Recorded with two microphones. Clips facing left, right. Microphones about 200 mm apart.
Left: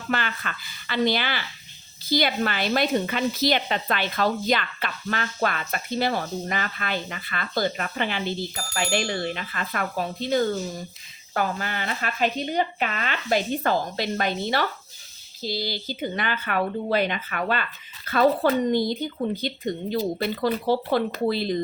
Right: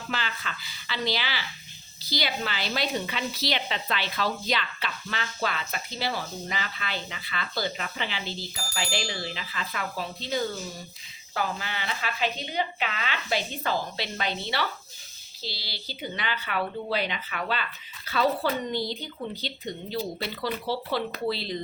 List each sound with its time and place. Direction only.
0.1 s a woman's voice: 55° left (ahead or behind)